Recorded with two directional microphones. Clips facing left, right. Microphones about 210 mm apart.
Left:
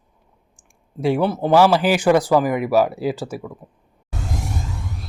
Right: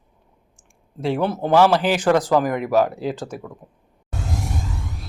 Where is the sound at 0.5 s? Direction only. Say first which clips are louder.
Left 4 dB; 10° left (ahead or behind).